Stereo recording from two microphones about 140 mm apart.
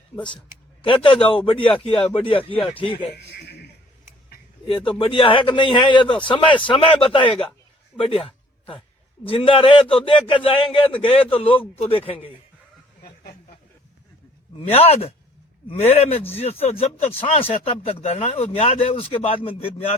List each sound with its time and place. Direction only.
0.8 s a man's voice: 35° left (ahead or behind)
4.9 s a man's voice: 35° left (ahead or behind)
14.7 s speech: 45° left (ahead or behind)